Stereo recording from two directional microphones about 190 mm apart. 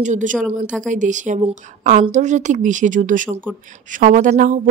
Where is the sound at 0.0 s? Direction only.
40° right (ahead or behind).